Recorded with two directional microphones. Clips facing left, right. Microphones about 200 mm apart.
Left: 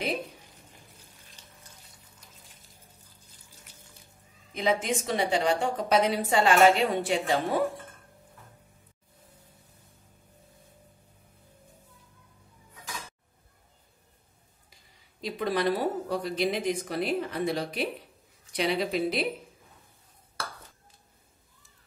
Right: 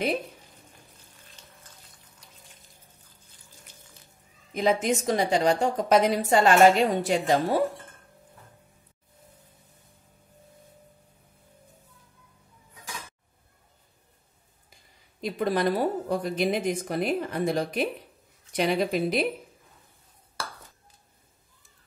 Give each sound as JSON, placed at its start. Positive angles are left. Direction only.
{"t": 4.6, "sound": "a woman's voice", "side_deg": -45}
{"t": 15.1, "sound": "speech", "side_deg": -50}